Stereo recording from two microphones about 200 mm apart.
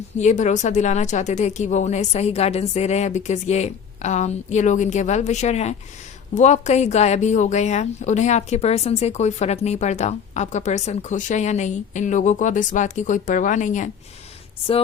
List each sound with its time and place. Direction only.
0.2 s a woman's voice: 35° left (ahead or behind)